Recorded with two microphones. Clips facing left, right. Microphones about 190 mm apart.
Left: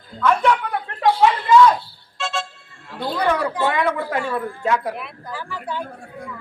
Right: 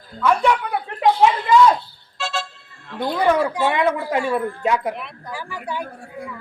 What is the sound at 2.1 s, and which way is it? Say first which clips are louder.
Vehicle: even; centre (ahead or behind).